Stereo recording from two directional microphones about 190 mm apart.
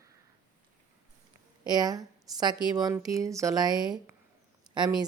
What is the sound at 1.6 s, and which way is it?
A woman's voice, 20° right (ahead or behind).